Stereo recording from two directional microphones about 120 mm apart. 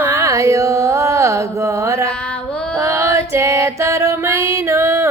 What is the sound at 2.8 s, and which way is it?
Music, 25° right (ahead or behind).